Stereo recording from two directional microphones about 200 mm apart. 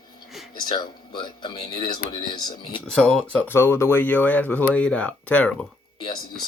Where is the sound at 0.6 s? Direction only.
20° left (ahead or behind).